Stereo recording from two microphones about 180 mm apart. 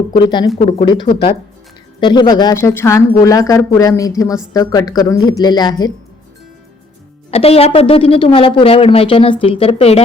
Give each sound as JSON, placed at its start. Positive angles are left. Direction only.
{"t": 0.1, "sound": "speech", "side_deg": 25}
{"t": 7.3, "sound": "a woman's voice", "side_deg": 35}